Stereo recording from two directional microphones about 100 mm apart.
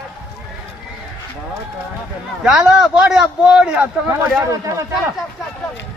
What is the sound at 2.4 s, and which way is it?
A man's voice, 10° right (ahead or behind).